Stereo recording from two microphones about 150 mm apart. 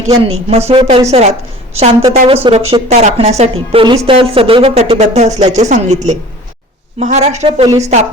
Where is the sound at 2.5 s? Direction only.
40° right (ahead or behind).